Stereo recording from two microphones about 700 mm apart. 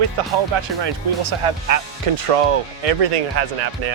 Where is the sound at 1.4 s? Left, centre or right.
Right.